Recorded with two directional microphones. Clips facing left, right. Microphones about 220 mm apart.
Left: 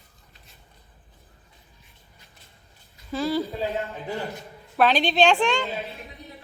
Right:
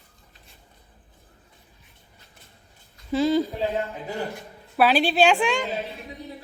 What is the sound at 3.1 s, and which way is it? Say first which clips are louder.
Speech: right 5 dB; 20° right (ahead or behind).